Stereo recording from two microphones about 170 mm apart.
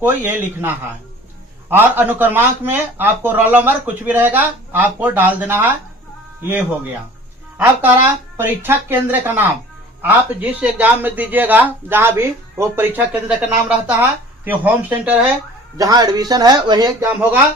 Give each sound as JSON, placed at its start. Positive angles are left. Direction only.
{"t": 0.0, "sound": "a man's voice", "side_deg": -10}
{"t": 1.7, "sound": "a man's voice", "side_deg": -10}
{"t": 7.6, "sound": "a man's voice", "side_deg": -10}
{"t": 15.8, "sound": "speech", "side_deg": -20}
{"t": 17.1, "sound": "a man's voice", "side_deg": -10}